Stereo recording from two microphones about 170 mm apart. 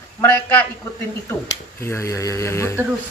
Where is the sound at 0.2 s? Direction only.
10° left (ahead or behind).